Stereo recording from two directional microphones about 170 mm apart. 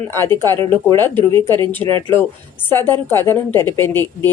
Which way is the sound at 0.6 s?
30° right (ahead or behind).